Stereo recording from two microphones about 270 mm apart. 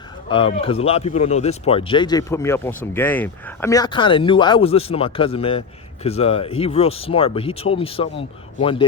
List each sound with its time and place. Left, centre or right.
0.3 s speech: centre